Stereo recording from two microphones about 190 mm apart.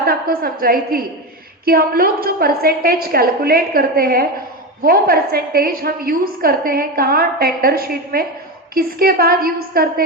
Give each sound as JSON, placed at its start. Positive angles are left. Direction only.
{"t": 0.0, "sound": "a woman's voice", "side_deg": -50}